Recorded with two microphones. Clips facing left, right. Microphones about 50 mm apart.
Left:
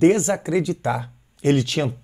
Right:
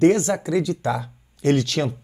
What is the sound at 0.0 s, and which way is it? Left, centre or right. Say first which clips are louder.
Speech: even; centre.